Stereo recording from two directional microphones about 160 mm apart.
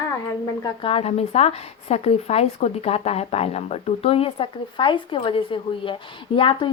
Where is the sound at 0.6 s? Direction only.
35° left (ahead or behind).